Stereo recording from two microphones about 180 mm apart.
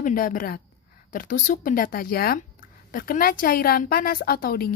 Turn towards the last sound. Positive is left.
turn(degrees=55)  # may be behind; listen again after turning